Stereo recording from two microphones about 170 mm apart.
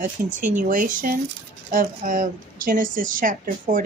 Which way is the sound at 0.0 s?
50° right (ahead or behind).